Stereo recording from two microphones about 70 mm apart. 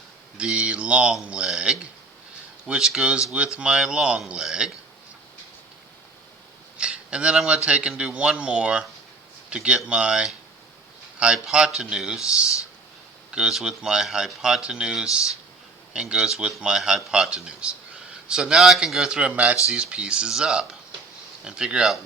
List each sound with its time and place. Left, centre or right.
0.3 s speech: centre
6.7 s speech: centre